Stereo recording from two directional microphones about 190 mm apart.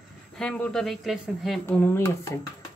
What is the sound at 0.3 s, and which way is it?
Speech, 5° left (ahead or behind).